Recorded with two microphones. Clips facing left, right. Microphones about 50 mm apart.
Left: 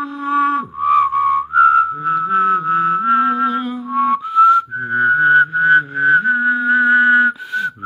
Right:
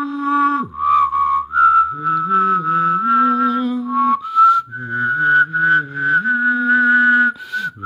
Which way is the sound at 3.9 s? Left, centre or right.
Left.